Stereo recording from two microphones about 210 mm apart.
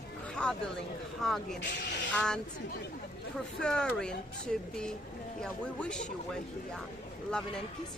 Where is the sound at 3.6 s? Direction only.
5° left (ahead or behind).